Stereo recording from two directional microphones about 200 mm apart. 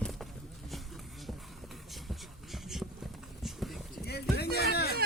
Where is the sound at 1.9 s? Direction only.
Centre (ahead or behind).